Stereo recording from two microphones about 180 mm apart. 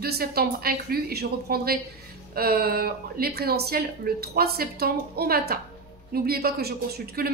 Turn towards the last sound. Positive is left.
turn(degrees=-60)  # may be behind; listen again after turning